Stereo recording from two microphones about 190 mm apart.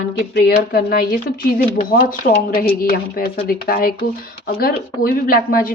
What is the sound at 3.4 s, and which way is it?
A woman's voice, 50° left (ahead or behind).